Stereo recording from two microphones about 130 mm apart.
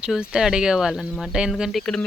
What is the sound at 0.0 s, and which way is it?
Speech, 5° right (ahead or behind).